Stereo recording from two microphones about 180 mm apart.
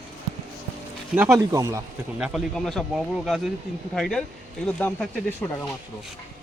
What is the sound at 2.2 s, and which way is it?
Speech, centre (ahead or behind).